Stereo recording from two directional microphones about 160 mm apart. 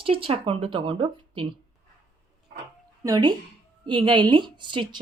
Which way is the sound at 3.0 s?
25° right (ahead or behind).